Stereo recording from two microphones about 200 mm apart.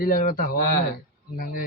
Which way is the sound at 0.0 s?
45° left (ahead or behind).